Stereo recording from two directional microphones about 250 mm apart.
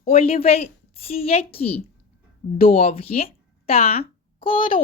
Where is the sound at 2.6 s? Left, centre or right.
Left.